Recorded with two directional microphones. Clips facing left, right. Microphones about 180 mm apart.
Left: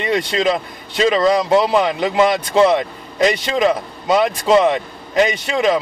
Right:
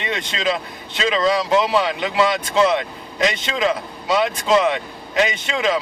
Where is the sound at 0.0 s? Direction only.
40° left (ahead or behind).